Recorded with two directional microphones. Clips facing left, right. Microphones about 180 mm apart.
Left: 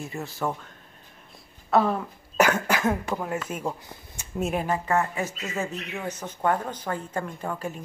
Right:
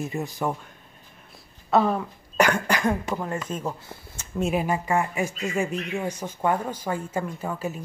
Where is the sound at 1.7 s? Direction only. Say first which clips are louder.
Right 1 dB; centre (ahead or behind).